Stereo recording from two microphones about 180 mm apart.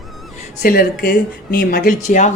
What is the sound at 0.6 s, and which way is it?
A woman's voice, 55° left (ahead or behind).